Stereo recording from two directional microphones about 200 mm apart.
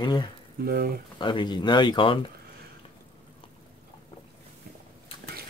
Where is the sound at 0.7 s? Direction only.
50° right (ahead or behind).